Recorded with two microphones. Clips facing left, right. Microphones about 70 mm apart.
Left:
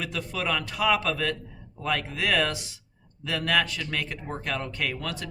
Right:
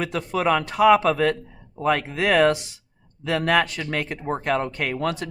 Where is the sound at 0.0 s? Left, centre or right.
Right.